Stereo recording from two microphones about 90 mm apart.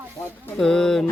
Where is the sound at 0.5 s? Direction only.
5° left (ahead or behind).